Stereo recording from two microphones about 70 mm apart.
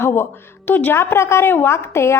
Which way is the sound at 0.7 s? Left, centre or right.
Left.